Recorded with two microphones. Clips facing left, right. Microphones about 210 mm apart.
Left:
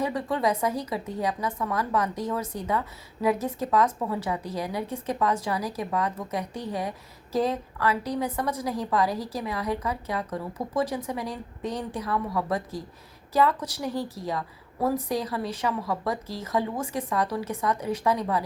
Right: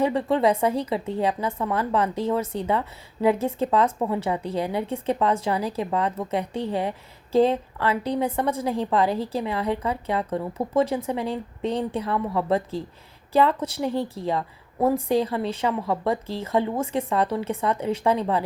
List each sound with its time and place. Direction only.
0.0 s speech: 25° right (ahead or behind)